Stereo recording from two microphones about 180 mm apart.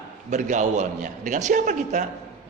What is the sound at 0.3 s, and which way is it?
A man's voice, 40° right (ahead or behind).